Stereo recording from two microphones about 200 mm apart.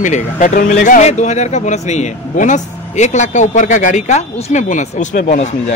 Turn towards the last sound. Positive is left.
turn(degrees=35)  # may be behind; listen again after turning